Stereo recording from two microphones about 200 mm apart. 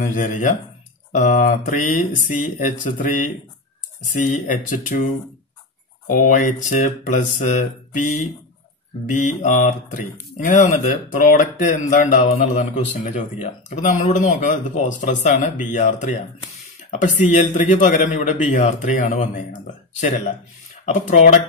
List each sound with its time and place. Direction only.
0.0 s speech: 40° left (ahead or behind)
4.5 s speech: 40° left (ahead or behind)
20.9 s speech: 35° left (ahead or behind)